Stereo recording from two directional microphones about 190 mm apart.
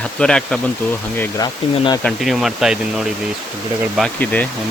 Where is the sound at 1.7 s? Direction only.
25° left (ahead or behind).